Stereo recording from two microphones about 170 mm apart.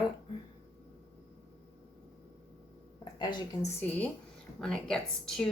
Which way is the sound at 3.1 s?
25° left (ahead or behind).